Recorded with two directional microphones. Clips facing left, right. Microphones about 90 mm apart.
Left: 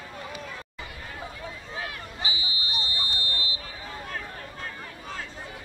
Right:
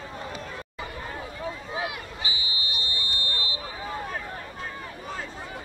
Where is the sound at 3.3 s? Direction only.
30° right (ahead or behind).